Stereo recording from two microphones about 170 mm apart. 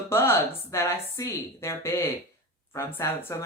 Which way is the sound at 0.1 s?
15° left (ahead or behind).